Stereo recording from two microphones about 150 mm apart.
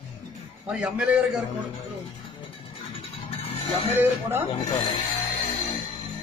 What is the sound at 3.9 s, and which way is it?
Speech, 15° right (ahead or behind).